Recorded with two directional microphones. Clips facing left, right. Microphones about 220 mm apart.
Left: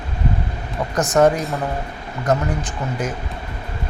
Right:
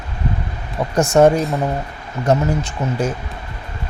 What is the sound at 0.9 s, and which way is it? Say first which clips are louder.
Speech: right 3 dB; 25° right (ahead or behind).